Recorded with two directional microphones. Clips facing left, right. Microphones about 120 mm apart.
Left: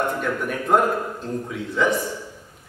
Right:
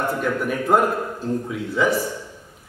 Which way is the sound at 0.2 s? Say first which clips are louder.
Right 2 dB; 5° right (ahead or behind).